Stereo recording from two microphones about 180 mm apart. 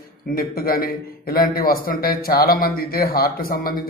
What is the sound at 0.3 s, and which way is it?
A man's voice, 55° left (ahead or behind).